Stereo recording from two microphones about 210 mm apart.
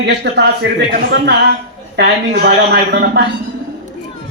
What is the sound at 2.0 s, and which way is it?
A woman's voice, 55° right (ahead or behind).